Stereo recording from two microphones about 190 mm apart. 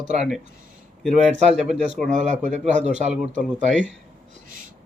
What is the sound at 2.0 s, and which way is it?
Speech, 40° right (ahead or behind).